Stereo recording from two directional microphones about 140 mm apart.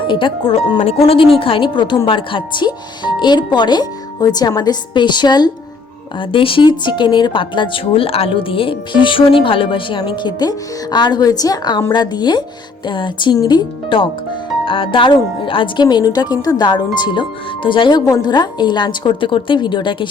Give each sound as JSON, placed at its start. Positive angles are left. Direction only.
{"t": 0.1, "sound": "a woman's voice", "side_deg": 35}